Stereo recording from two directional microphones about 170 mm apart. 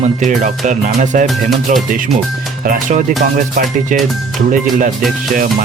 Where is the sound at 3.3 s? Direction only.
50° right (ahead or behind).